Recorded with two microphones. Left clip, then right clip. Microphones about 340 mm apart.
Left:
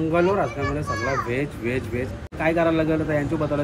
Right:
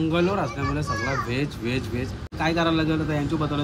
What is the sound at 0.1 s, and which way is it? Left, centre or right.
Speech, centre.